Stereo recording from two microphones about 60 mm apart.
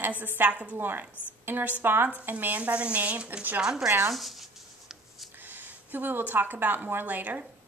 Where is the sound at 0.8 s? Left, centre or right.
Right.